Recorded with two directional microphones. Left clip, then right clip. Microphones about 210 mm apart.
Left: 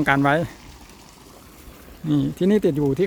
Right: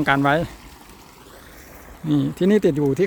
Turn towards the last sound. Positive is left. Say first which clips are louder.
# right 2 dB
turn(degrees=-5)  # may be behind; listen again after turning